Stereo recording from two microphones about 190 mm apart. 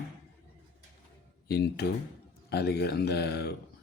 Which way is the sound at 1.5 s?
55° left (ahead or behind).